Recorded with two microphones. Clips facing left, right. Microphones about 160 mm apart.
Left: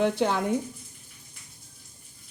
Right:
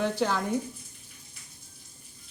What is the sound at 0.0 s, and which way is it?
Speech, 20° left (ahead or behind).